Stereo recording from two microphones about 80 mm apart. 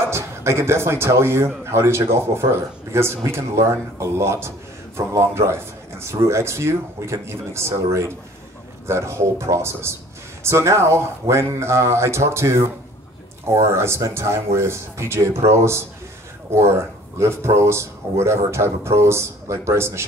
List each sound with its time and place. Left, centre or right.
0.1 s a man's voice: right